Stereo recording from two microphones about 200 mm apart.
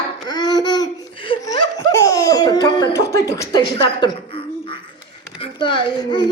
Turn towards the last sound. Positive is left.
turn(degrees=20)  # may be behind; listen again after turning